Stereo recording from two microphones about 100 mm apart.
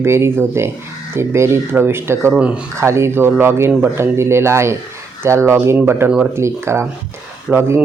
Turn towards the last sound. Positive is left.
turn(degrees=-25)  # may be behind; listen again after turning